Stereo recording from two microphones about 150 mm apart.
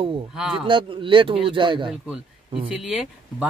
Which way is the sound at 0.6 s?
35° right (ahead or behind).